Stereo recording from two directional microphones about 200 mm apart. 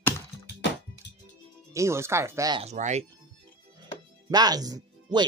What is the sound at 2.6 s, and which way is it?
Speech, 35° right (ahead or behind).